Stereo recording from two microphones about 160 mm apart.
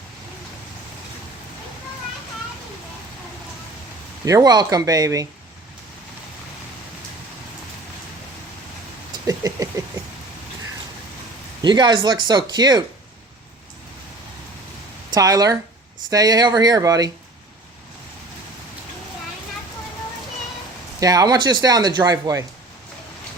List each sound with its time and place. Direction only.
4.3 s speech: 25° right (ahead or behind)
9.2 s a sound: 20° right (ahead or behind)
11.6 s speech: 30° right (ahead or behind)
15.1 s speech: 25° right (ahead or behind)
21.0 s speech: 25° right (ahead or behind)